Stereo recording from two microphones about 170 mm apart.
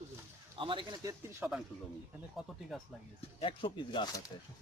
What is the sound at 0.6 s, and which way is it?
Speech, 30° right (ahead or behind).